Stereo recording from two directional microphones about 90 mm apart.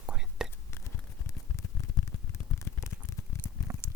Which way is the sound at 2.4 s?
15° left (ahead or behind).